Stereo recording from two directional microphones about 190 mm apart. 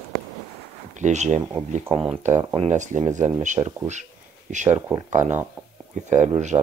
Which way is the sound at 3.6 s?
20° right (ahead or behind).